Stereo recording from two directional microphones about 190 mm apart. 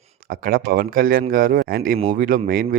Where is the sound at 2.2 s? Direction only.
50° right (ahead or behind).